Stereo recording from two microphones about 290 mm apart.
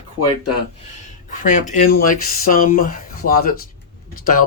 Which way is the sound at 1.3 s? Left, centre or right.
Left.